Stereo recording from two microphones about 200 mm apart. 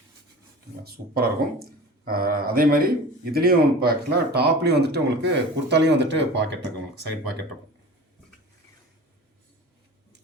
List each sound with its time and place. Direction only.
0.9 s speech: 50° right (ahead or behind)